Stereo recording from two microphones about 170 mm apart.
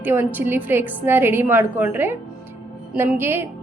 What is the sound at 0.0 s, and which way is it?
A woman's voice, 10° right (ahead or behind).